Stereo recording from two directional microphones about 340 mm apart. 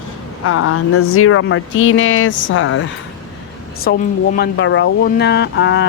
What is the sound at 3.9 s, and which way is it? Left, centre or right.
Speech, left.